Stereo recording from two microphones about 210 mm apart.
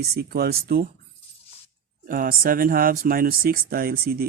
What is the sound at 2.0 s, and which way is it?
Speech, 40° right (ahead or behind).